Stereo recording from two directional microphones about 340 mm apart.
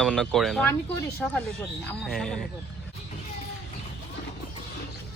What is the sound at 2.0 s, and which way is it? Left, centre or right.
Speech, centre.